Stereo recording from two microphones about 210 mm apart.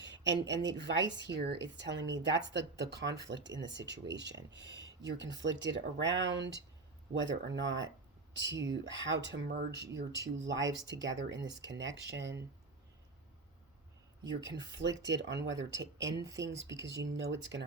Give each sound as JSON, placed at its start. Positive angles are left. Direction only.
{"t": 0.2, "sound": "speech", "side_deg": -55}
{"t": 14.5, "sound": "speech", "side_deg": -55}